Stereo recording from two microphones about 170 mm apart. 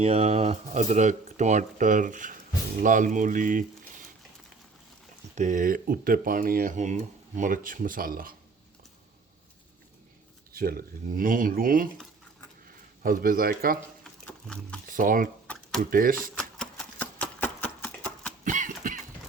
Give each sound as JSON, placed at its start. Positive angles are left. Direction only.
{"t": 0.0, "sound": "speech", "side_deg": -40}
{"t": 5.3, "sound": "speech", "side_deg": -45}
{"t": 10.5, "sound": "speech", "side_deg": -60}
{"t": 14.0, "sound": "roaring cats", "side_deg": 5}
{"t": 14.8, "sound": "speech", "side_deg": -50}
{"t": 16.3, "sound": "a sound", "side_deg": 5}
{"t": 18.4, "sound": "a sound", "side_deg": -50}